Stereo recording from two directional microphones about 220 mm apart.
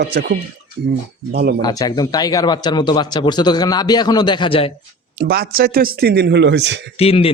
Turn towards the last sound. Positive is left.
turn(degrees=25)  # may be behind; listen again after turning